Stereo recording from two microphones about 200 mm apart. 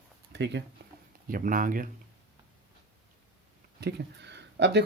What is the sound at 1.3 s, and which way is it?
Speech, 45° right (ahead or behind).